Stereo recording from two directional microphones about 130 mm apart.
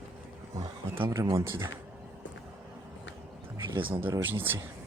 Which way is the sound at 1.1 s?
25° right (ahead or behind).